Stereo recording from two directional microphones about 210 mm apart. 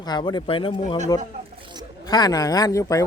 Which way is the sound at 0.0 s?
20° left (ahead or behind).